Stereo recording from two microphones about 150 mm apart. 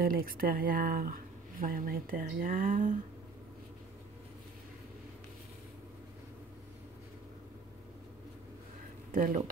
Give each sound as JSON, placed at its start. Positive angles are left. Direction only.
{"t": 0.0, "sound": "speech", "side_deg": -75}
{"t": 9.1, "sound": "speech", "side_deg": -65}